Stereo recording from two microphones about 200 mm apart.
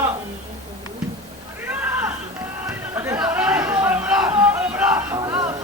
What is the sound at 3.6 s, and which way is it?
Music, 10° right (ahead or behind).